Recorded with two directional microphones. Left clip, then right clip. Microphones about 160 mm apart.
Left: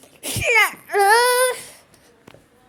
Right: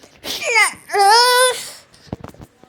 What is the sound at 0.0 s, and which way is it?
Baby cry, 20° left (ahead or behind).